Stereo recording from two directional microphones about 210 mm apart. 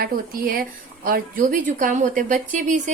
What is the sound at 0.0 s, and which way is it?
A woman's voice, 45° right (ahead or behind).